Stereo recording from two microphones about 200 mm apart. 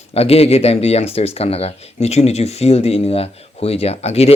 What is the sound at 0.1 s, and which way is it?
Speech, 30° left (ahead or behind).